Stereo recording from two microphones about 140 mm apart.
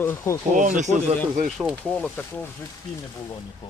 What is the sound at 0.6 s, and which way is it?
Speech, 60° right (ahead or behind).